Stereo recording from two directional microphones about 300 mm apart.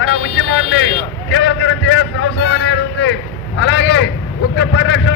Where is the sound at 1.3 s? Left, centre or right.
Left.